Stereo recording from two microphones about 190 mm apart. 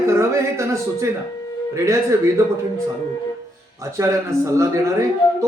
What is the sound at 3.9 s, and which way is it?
Speech, 15° right (ahead or behind).